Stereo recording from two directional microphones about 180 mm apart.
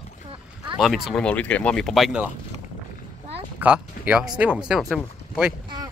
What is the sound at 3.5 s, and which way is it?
Speech, 10° right (ahead or behind).